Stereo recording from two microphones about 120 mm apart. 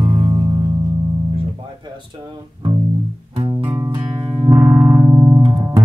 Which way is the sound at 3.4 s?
35° right (ahead or behind).